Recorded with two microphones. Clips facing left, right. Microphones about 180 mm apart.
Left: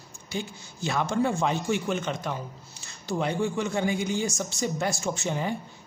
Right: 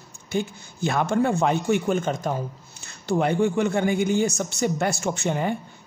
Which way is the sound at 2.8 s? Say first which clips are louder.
Right 6 dB; 60° right (ahead or behind).